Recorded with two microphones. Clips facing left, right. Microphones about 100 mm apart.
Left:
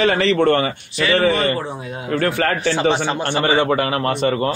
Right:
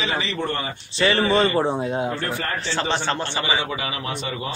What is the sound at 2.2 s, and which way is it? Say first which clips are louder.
Speech: left 8 dB; 90° left.